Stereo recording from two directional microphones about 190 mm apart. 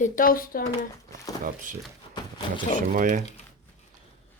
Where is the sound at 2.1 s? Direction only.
25° left (ahead or behind).